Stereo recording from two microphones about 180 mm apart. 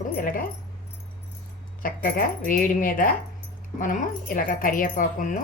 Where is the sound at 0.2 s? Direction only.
50° left (ahead or behind).